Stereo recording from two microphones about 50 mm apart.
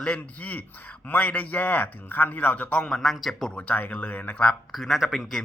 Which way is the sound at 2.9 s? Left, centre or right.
Centre.